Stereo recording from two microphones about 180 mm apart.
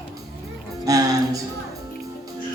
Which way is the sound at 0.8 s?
20° right (ahead or behind).